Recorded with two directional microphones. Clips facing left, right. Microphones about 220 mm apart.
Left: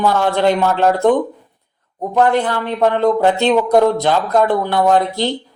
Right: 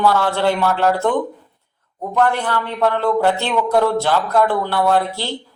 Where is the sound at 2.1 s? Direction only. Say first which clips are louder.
Left 3 dB; 15° left (ahead or behind).